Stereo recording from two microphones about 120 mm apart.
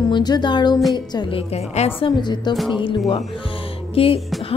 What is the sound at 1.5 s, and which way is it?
Speech, 60° left (ahead or behind).